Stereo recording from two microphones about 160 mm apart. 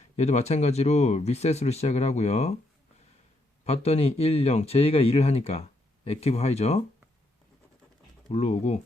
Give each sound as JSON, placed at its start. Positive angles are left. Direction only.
{"t": 0.0, "sound": "speech", "side_deg": 45}
{"t": 3.7, "sound": "speech", "side_deg": 40}
{"t": 8.3, "sound": "speech", "side_deg": 40}